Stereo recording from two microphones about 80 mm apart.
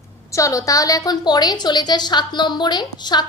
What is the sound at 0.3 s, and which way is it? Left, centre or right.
A woman's voice, left.